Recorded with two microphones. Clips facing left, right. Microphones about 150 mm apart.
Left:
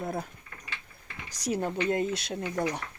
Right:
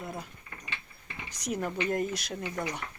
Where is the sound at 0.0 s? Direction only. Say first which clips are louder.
Left 6 dB; 40° left (ahead or behind).